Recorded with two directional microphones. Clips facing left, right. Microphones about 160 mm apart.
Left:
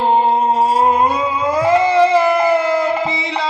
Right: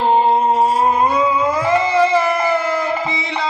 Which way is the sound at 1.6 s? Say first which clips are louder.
Left 5 dB; 30° left (ahead or behind).